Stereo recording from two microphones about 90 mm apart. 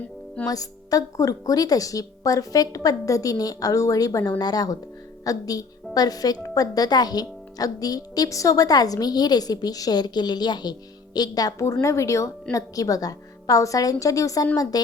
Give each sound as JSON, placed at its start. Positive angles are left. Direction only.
{"t": 0.4, "sound": "a woman's voice", "side_deg": 40}
{"t": 11.6, "sound": "a woman's voice", "side_deg": 30}